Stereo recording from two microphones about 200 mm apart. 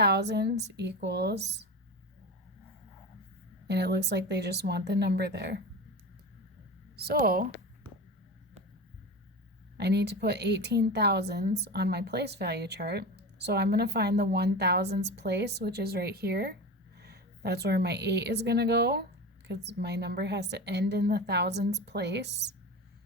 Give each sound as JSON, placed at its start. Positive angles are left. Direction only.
{"t": 0.0, "sound": "speech", "side_deg": -55}
{"t": 3.7, "sound": "speech", "side_deg": -60}
{"t": 6.9, "sound": "speech", "side_deg": -50}
{"t": 9.7, "sound": "a woman's voice", "side_deg": -55}